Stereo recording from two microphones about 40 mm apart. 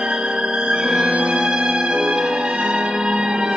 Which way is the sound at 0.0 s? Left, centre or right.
Right.